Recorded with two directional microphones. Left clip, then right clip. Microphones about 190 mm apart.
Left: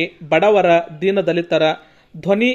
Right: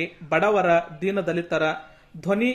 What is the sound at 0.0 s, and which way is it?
Speech, 20° left (ahead or behind).